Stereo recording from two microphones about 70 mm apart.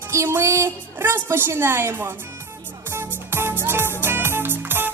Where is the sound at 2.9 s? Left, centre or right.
Right.